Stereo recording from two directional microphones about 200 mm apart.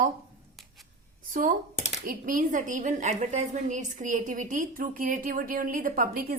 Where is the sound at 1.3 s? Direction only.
40° right (ahead or behind).